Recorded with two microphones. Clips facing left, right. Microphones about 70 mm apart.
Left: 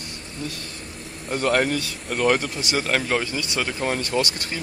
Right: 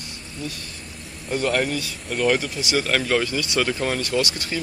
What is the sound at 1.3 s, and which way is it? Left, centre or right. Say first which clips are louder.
A man's voice: left 1 dB; left.